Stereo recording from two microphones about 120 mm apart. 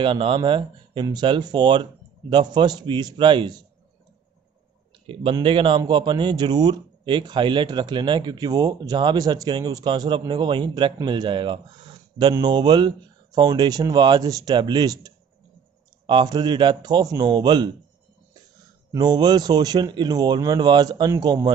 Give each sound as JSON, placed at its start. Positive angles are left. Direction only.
{"t": 0.0, "sound": "a man's voice", "side_deg": -45}
{"t": 5.0, "sound": "a man's voice", "side_deg": -45}
{"t": 18.9, "sound": "a man's voice", "side_deg": -35}